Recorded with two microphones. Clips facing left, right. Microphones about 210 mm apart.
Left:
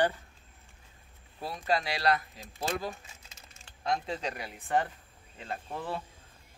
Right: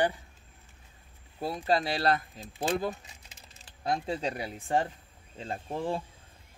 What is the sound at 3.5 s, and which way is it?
Speech, 35° right (ahead or behind).